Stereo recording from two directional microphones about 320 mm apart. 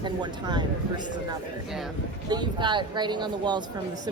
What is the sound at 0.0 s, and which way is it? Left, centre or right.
Speech, centre.